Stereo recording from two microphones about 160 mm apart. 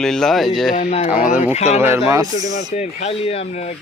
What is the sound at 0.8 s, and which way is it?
Speech, 45° left (ahead or behind).